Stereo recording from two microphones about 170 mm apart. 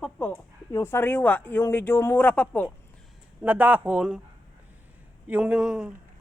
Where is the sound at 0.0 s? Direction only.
10° left (ahead or behind).